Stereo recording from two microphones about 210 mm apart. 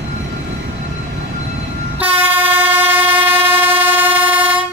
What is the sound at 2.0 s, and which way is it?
Train, 10° right (ahead or behind).